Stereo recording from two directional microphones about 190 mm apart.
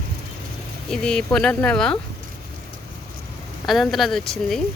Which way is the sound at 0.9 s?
5° left (ahead or behind).